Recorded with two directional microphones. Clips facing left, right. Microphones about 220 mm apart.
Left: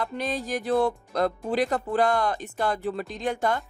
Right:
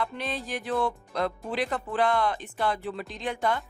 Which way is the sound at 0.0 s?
40° left (ahead or behind).